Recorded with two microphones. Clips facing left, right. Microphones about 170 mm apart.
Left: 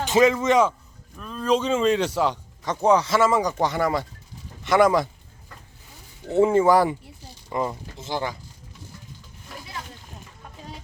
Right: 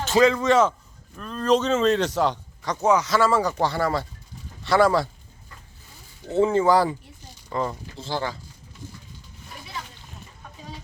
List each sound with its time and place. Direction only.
0.0 s speech: 15° left (ahead or behind)
1.1 s speech: 5° left (ahead or behind)
2.6 s a man's voice: 30° left (ahead or behind)
6.4 s a man's voice: 25° left (ahead or behind)
7.5 s speech: 15° left (ahead or behind)